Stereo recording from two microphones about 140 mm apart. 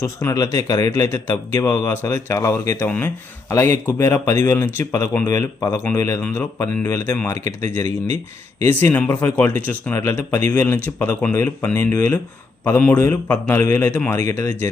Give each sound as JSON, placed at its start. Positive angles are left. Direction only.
{"t": 0.0, "sound": "speech", "side_deg": 20}
{"t": 6.2, "sound": "a man's voice", "side_deg": 10}
{"t": 7.3, "sound": "speech", "side_deg": -60}
{"t": 7.7, "sound": "a man's voice", "side_deg": 20}